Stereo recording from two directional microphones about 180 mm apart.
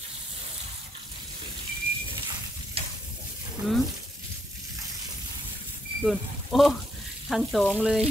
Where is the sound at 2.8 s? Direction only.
30° right (ahead or behind).